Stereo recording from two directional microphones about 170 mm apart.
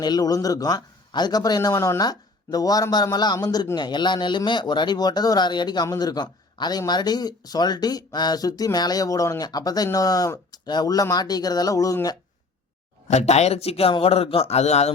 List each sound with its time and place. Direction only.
0.0 s a man's voice: 25° left (ahead or behind)
13.1 s a man's voice: 40° left (ahead or behind)